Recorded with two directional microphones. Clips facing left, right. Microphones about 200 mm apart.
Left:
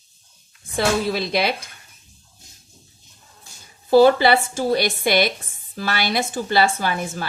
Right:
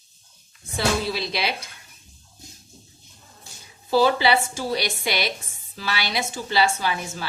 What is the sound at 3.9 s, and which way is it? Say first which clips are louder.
A woman's voice: left 6 dB; 50° left (ahead or behind).